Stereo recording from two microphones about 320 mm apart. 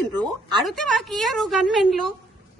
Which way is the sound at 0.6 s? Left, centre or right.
Centre.